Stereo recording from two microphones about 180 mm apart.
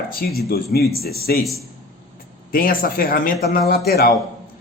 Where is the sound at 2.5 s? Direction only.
50° left (ahead or behind).